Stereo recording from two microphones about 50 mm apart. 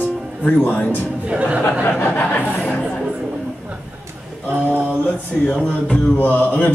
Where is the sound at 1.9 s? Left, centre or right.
Left.